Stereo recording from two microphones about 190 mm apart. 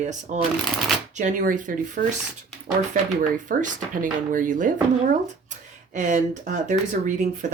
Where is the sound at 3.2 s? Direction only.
45° right (ahead or behind).